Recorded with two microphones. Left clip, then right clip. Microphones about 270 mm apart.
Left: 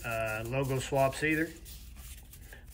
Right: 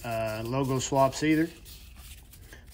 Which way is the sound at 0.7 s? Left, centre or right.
Centre.